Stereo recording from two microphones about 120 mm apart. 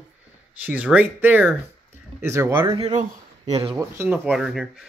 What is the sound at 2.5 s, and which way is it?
Speech, 45° right (ahead or behind).